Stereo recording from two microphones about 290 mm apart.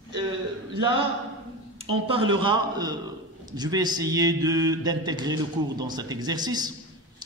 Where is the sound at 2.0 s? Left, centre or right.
Centre.